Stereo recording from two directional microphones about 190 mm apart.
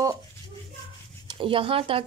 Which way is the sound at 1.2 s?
25° right (ahead or behind).